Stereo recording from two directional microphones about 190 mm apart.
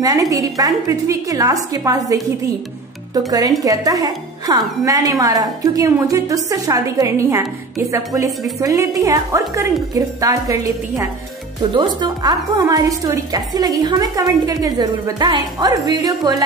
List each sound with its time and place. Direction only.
0.0 s a woman's voice: 20° right (ahead or behind)
3.2 s a woman's voice: 20° right (ahead or behind)